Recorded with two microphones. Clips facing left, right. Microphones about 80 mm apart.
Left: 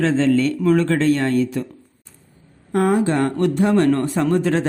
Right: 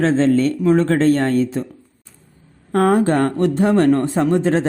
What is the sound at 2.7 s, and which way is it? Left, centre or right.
Speech, right.